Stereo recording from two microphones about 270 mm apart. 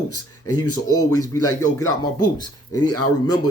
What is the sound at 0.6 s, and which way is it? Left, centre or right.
Speech, left.